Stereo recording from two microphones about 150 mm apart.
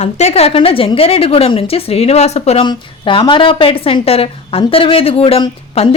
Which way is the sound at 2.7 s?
35° left (ahead or behind).